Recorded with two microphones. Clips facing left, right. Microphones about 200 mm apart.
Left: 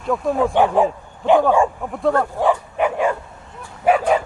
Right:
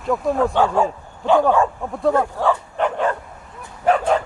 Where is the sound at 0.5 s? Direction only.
15° left (ahead or behind).